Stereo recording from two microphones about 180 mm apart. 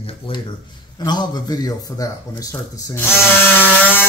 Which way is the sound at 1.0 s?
25° left (ahead or behind).